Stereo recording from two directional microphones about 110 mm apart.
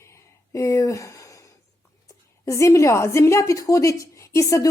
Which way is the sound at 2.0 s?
30° left (ahead or behind).